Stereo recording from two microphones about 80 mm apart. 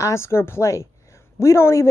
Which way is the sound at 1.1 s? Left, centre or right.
Left.